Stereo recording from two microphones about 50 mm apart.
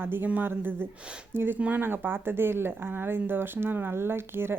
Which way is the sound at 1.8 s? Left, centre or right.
Right.